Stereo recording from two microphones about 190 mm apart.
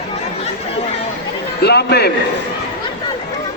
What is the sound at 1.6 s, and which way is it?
Speech, 60° left (ahead or behind).